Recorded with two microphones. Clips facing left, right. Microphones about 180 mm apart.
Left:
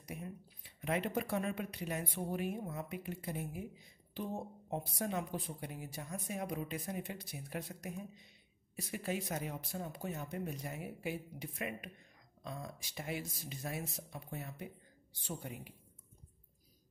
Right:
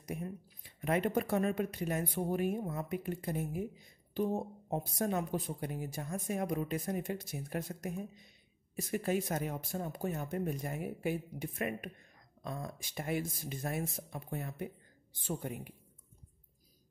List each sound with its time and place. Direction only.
0.0 s speech: 50° right (ahead or behind)